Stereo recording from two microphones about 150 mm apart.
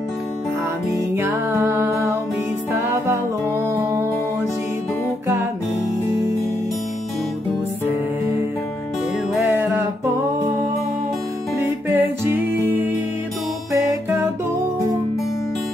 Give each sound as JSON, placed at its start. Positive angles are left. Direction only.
{"t": 1.1, "sound": "music", "side_deg": -20}
{"t": 9.4, "sound": "music", "side_deg": -15}
{"t": 11.6, "sound": "music", "side_deg": -15}